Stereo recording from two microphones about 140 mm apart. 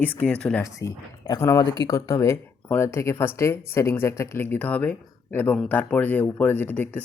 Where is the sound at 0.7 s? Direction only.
20° left (ahead or behind).